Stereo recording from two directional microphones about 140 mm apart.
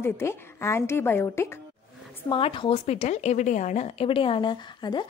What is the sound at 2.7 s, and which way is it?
A woman's voice, 50° left (ahead or behind).